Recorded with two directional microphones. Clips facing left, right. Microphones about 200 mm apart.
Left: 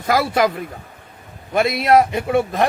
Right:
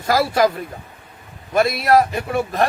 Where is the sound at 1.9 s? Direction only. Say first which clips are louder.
Left 1 dB; 25° left (ahead or behind).